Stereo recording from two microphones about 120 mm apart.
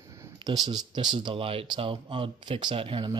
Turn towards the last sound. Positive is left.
turn(degrees=-40)  # may be behind; listen again after turning